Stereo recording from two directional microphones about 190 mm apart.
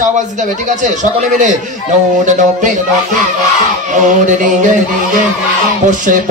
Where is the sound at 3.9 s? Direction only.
40° right (ahead or behind).